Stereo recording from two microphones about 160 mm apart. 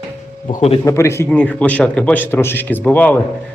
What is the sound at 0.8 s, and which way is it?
A man's voice, 20° left (ahead or behind).